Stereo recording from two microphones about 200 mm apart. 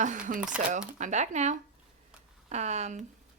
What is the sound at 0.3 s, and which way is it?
Speech, 45° right (ahead or behind).